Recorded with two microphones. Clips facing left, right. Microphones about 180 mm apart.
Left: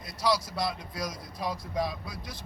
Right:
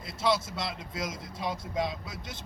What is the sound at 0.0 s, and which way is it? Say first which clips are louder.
A man's voice: even; 25° right (ahead or behind).